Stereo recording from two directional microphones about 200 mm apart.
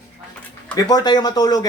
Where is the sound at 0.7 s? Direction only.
20° left (ahead or behind).